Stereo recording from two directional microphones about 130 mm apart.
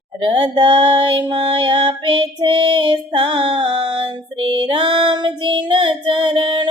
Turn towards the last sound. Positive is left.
turn(degrees=-40)  # may be behind; listen again after turning